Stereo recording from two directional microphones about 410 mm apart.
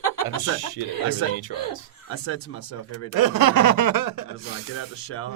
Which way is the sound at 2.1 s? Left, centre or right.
Left.